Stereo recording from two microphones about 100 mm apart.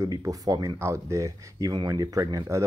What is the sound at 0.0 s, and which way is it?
Speech, 35° right (ahead or behind).